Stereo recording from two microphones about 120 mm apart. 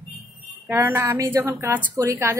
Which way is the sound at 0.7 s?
20° right (ahead or behind).